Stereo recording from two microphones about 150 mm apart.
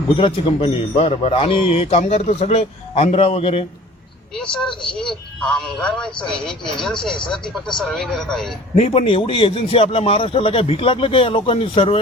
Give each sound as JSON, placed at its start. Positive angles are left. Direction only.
{"t": 0.2, "sound": "a man's voice", "side_deg": 35}
{"t": 4.6, "sound": "speech", "side_deg": 5}
{"t": 8.7, "sound": "a man's voice", "side_deg": 45}